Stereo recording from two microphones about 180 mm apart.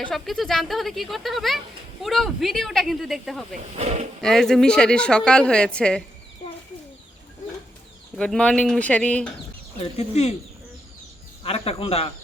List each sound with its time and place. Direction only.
0.0 s speech: centre (ahead or behind)
3.6 s speech: 40° right (ahead or behind)
4.2 s speech: 5° left (ahead or behind)
8.1 s speech: 5° left (ahead or behind)
9.8 s speech: 35° left (ahead or behind)
11.4 s speech: 35° left (ahead or behind)